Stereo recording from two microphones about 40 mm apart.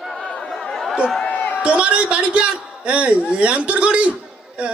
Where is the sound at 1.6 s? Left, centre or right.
Right.